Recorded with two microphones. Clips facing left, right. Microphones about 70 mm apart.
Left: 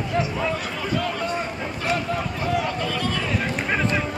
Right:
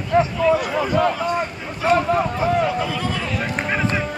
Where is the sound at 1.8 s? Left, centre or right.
Right.